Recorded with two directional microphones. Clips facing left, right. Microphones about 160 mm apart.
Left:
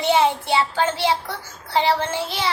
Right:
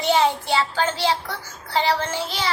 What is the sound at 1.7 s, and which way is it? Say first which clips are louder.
Speech: left 2 dB; 20° left (ahead or behind).